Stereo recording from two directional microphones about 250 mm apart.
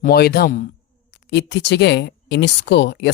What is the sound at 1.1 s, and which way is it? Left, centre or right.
Speech, left.